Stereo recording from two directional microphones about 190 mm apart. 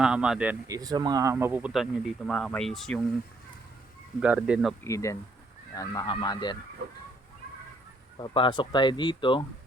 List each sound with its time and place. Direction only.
0.0 s speech: 5° right (ahead or behind)
0.7 s speech: 20° right (ahead or behind); by 3.0 s centre (ahead or behind)
4.2 s speech: 5° right (ahead or behind)
4.8 s speech: 15° left (ahead or behind)
8.2 s speech: 25° left (ahead or behind)